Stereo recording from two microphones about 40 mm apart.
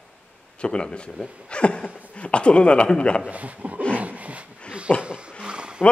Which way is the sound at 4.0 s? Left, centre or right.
Right.